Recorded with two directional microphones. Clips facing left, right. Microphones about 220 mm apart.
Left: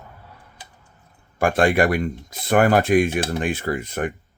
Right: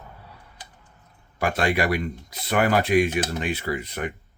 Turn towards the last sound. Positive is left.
turn(degrees=50)  # may be behind; listen again after turning